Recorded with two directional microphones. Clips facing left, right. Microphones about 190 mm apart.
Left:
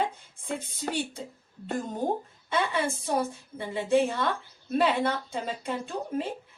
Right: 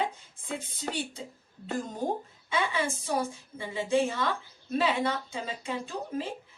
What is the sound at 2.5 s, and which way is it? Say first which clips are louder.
A woman's voice: left 2 dB; 60° left (ahead or behind).